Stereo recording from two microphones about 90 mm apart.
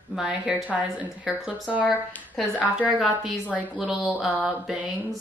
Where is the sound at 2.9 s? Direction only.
5° right (ahead or behind).